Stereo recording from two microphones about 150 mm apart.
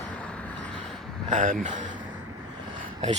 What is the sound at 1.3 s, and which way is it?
Speech, 60° right (ahead or behind).